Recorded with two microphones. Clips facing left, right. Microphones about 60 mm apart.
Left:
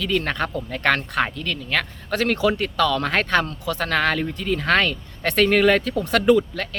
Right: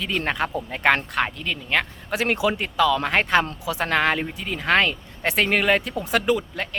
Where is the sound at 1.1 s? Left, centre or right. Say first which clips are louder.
Left 2 dB; centre.